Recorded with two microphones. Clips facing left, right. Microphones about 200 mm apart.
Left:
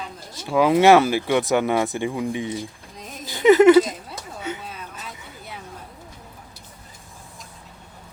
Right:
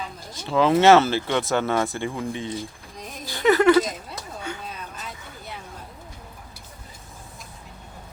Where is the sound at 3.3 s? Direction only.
20° left (ahead or behind).